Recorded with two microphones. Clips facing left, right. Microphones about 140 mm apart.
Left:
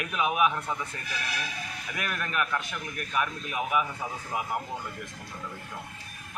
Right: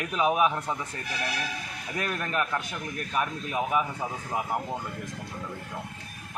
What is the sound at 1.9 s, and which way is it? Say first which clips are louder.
A man's voice: right 2 dB; 30° right (ahead or behind).